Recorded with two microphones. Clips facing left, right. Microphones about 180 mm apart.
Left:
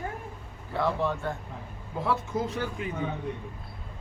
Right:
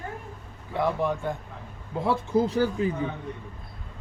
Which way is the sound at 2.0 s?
30° right (ahead or behind).